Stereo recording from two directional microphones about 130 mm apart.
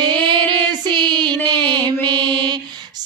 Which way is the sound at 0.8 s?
35° right (ahead or behind).